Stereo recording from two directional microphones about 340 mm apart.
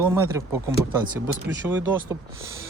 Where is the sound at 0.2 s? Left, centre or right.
Centre.